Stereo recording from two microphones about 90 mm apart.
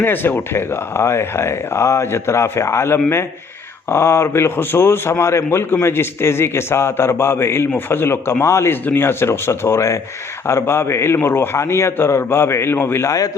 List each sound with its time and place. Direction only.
0.0 s speech: 20° left (ahead or behind); by 13.3 s 40° left (ahead or behind)